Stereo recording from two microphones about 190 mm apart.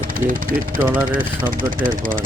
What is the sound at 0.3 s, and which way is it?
Speech, 45° right (ahead or behind).